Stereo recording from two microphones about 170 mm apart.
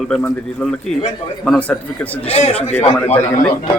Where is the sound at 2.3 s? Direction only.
40° left (ahead or behind).